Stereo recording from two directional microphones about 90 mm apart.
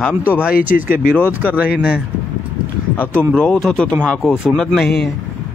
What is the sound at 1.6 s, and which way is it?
Speech, 10° right (ahead or behind).